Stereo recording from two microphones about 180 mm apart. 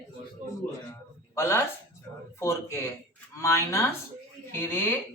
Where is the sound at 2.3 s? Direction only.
15° left (ahead or behind).